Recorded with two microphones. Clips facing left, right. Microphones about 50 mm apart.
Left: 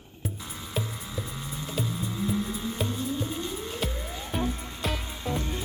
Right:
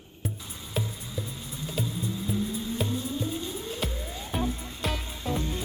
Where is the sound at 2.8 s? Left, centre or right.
Centre.